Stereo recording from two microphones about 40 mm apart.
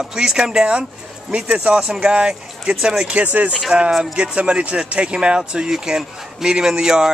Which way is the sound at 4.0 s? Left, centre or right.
Right.